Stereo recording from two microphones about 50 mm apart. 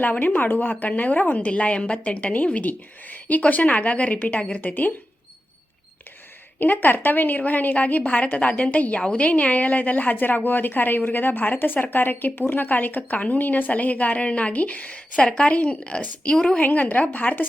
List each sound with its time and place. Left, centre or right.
0.0 s a woman's voice: left
6.6 s a woman's voice: left; by 16.6 s centre
16.6 s a woman's voice: left